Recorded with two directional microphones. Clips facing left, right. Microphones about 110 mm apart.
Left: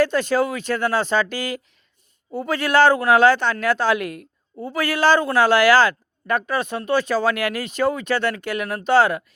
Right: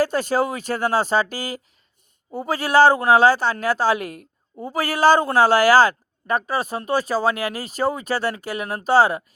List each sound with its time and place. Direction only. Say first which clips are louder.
0.0 s speech: left 1 dB; 45° right (ahead or behind)